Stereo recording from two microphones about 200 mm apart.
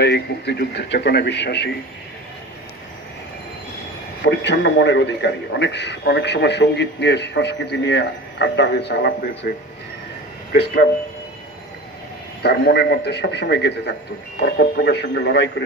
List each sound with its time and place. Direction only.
0.0 s a man's voice: 55° left (ahead or behind)
4.2 s a man's voice: 60° left (ahead or behind)
10.5 s speech: 55° left (ahead or behind)
12.4 s a man's voice: 55° left (ahead or behind)